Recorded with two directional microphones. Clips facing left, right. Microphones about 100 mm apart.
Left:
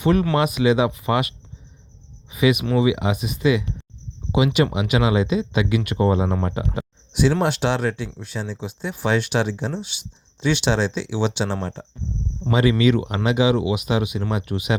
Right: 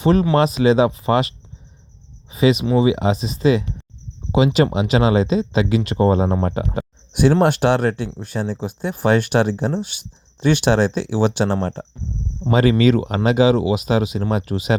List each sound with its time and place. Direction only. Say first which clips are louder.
0.0 s speech: right 3 dB; 25° right (ahead or behind)
2.3 s speech: right 3 dB; 30° right (ahead or behind)